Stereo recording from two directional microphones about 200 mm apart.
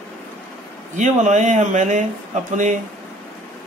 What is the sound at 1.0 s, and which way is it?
A man's voice, 35° right (ahead or behind).